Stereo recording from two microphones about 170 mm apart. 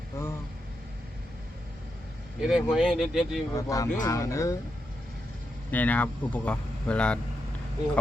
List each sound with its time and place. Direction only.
0.1 s speech: 15° left (ahead or behind)
2.4 s speech: 5° right (ahead or behind)
3.5 s speech: 20° left (ahead or behind)
5.7 s speech: 10° left (ahead or behind)